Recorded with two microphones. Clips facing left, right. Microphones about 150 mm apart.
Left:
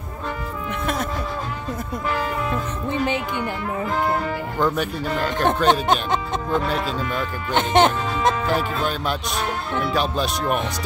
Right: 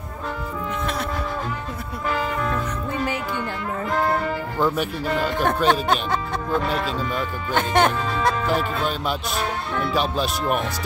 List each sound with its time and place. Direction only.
2.9 s music: 25° left (ahead or behind)
4.6 s speech: 5° right (ahead or behind)
5.7 s speech: 20° left (ahead or behind)
6.6 s speech: centre (ahead or behind)
7.5 s music: 20° left (ahead or behind)
8.5 s speech: centre (ahead or behind)